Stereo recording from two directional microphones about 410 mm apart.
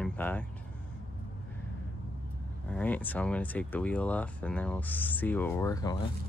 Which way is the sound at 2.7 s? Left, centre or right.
Centre.